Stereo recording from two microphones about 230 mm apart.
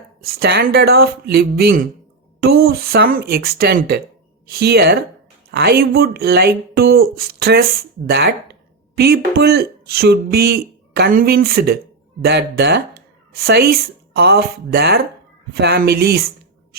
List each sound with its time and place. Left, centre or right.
0.2 s speech: right
9.0 s speech: right